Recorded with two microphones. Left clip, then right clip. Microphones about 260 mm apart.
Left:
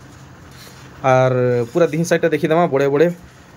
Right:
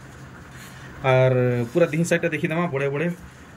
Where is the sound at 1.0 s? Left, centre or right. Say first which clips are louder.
Left 5 dB; centre.